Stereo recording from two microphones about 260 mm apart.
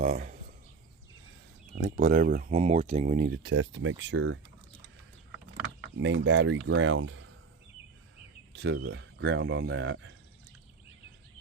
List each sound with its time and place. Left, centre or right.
0.0 s a sound: right
1.8 s speech: right
6.0 s speech: right
8.5 s speech: right